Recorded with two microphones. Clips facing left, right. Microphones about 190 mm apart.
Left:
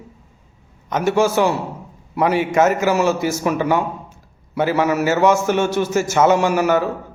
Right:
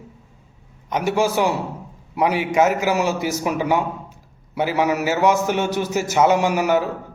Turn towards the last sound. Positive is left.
turn(degrees=-15)  # may be behind; listen again after turning